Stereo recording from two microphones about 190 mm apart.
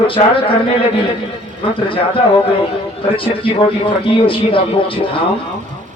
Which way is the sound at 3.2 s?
30° left (ahead or behind).